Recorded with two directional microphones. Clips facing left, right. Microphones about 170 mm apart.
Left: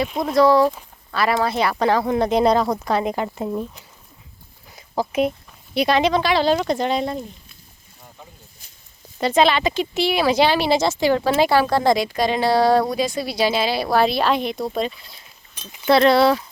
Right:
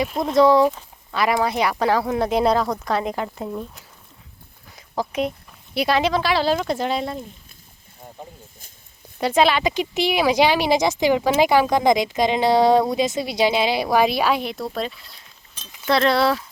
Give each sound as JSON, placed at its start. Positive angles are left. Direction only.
{"t": 0.1, "sound": "speech", "side_deg": 0}
{"t": 0.3, "sound": "speech", "side_deg": -20}
{"t": 4.7, "sound": "a sound", "side_deg": 0}
{"t": 5.7, "sound": "speech", "side_deg": -5}
{"t": 8.0, "sound": "a sound", "side_deg": -40}
{"t": 9.2, "sound": "speech", "side_deg": -10}